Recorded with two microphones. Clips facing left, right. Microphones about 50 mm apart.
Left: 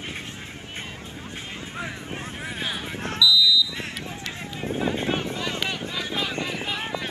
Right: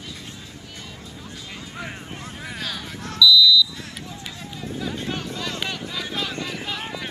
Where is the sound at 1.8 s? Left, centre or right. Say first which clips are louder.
Left 1 dB; left.